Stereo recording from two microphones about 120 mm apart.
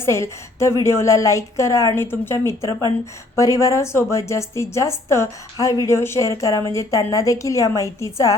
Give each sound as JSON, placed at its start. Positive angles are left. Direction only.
{"t": 0.0, "sound": "speech", "side_deg": 25}